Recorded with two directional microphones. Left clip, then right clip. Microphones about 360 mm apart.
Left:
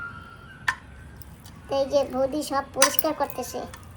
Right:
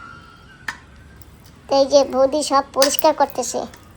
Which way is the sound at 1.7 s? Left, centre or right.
Right.